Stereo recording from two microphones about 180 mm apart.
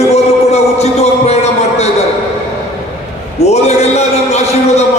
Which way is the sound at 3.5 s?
40° left (ahead or behind).